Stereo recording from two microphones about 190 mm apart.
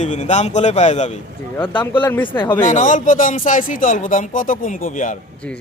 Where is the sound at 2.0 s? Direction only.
10° left (ahead or behind).